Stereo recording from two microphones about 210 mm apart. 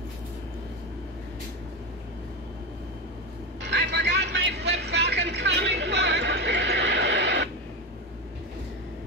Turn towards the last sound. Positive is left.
turn(degrees=-55)  # may be behind; listen again after turning